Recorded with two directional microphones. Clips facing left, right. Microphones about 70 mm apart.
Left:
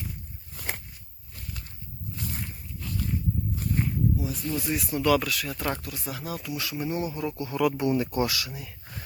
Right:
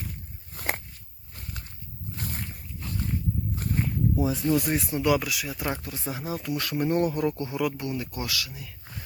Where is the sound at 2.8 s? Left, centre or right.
Right.